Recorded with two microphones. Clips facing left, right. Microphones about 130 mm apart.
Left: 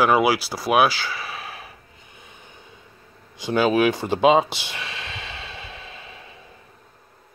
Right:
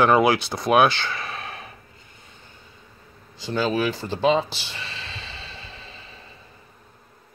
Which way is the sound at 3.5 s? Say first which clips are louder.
Left 5 dB; 65° left (ahead or behind).